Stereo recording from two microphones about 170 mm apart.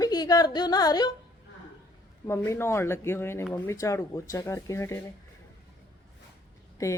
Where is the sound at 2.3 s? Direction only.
15° left (ahead or behind).